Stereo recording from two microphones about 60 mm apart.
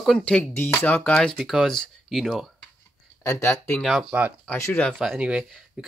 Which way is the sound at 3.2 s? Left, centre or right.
Left.